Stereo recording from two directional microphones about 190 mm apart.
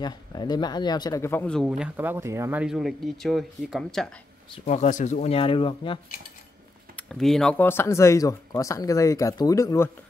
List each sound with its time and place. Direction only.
0.0 s speech: 20° left (ahead or behind); by 4.1 s centre (ahead or behind)
4.6 s speech: 40° left (ahead or behind)
7.0 s speech: 5° left (ahead or behind)